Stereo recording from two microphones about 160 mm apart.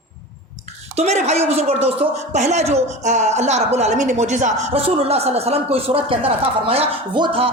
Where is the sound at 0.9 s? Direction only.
45° right (ahead or behind).